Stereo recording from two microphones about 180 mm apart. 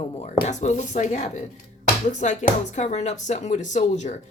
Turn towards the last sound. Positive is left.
turn(degrees=40)  # may be behind; listen again after turning